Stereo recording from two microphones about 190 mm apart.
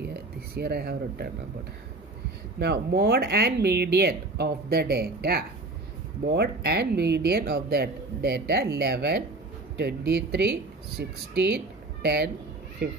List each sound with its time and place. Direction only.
0.0 s speech: 60° right (ahead or behind)
2.6 s speech: 60° right (ahead or behind)